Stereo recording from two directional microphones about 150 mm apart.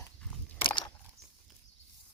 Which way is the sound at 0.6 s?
30° left (ahead or behind).